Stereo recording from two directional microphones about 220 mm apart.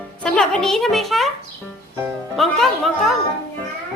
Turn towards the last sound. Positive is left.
turn(degrees=0)  # may be behind; listen again after turning